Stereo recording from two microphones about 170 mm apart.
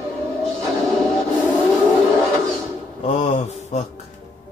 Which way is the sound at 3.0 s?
35° left (ahead or behind).